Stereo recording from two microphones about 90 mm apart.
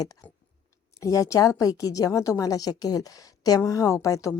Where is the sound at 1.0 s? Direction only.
35° left (ahead or behind).